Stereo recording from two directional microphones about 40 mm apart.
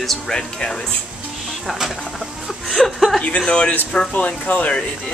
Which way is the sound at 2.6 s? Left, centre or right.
Centre.